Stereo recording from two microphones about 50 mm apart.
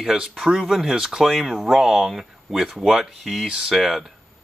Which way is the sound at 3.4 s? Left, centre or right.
Centre.